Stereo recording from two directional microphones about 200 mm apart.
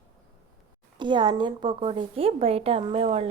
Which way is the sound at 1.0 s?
25° right (ahead or behind).